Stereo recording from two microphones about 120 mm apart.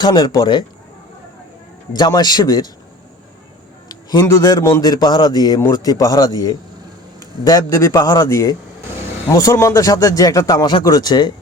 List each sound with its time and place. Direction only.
0.0 s a man's voice: 35° left (ahead or behind)
1.9 s a man's voice: 35° left (ahead or behind)
3.8 s a man's voice: 30° left (ahead or behind)